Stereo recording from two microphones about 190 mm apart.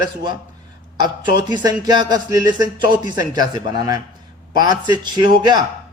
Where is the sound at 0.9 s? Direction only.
20° right (ahead or behind).